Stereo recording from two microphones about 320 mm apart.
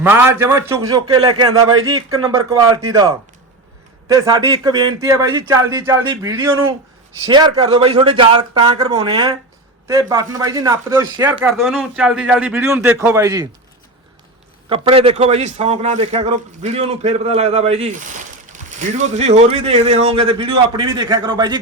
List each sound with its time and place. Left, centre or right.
0.0 s a man's voice: centre
1.6 s a man's voice: right
2.2 s a man's voice: centre
14.7 s a man's voice: centre